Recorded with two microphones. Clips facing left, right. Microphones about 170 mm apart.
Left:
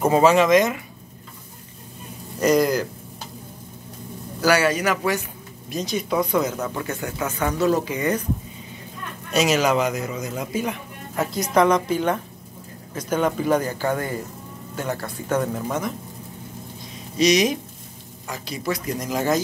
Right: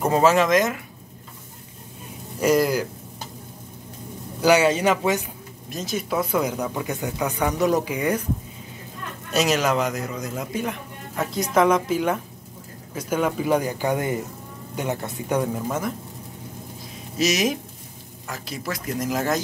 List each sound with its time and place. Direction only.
0.0 s a man's voice: centre (ahead or behind)
2.4 s speech: 5° right (ahead or behind)
4.4 s a man's voice: 20° right (ahead or behind)
5.7 s speech: centre (ahead or behind)
9.3 s a man's voice: centre (ahead or behind)
17.2 s a man's voice: 5° right (ahead or behind)